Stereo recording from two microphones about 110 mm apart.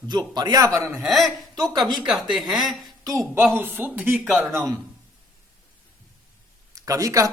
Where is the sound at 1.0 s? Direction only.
Centre (ahead or behind).